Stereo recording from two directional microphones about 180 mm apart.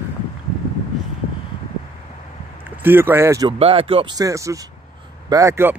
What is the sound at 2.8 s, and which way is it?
Speech, 10° right (ahead or behind).